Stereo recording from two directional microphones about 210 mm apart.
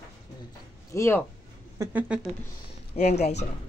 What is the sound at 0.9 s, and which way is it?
Speech, 10° left (ahead or behind).